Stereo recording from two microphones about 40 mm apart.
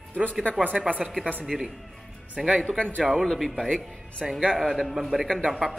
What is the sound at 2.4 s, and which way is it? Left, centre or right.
Speech, centre.